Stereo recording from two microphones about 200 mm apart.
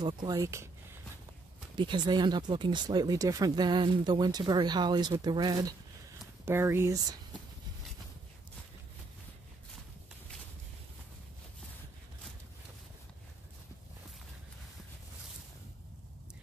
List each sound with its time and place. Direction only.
0.0 s speech: 20° right (ahead or behind)
1.8 s speech: 20° right (ahead or behind)